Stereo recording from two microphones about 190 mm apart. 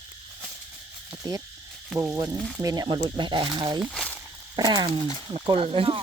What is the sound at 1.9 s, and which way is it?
Speech, 15° right (ahead or behind).